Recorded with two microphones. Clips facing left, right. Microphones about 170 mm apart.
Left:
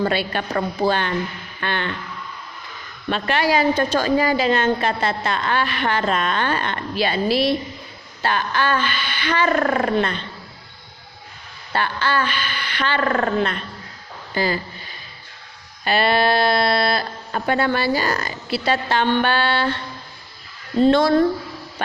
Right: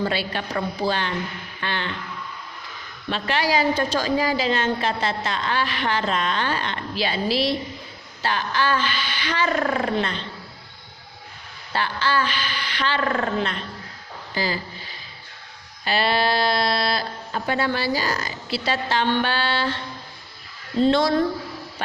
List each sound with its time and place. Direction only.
0.0 s a woman's voice: 55° left (ahead or behind)
3.1 s a woman's voice: 55° left (ahead or behind)
11.7 s a woman's voice: 55° left (ahead or behind)